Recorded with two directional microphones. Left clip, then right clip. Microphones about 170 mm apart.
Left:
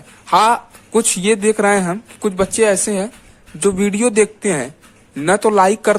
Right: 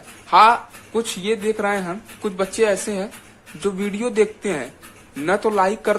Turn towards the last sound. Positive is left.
turn(degrees=50)  # may be behind; listen again after turning